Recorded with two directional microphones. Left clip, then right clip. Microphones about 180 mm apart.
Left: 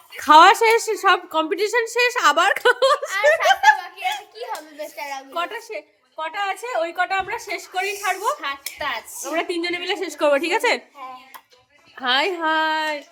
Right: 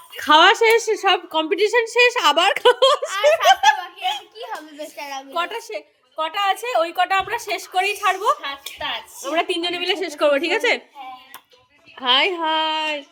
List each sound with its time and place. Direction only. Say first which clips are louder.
0.2 s a woman's voice: left 2 dB; 10° left (ahead or behind); by 5.5 s 10° right (ahead or behind)
5.5 s a woman's voice: right 2 dB; 30° right (ahead or behind)
9.2 s a woman's voice: right 3 dB; 20° right (ahead or behind); by 10.8 s 10° left (ahead or behind)
11.9 s a woman's voice: right 3 dB; 5° left (ahead or behind)